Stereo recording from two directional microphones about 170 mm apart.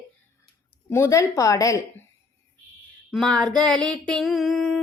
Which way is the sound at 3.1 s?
5° left (ahead or behind).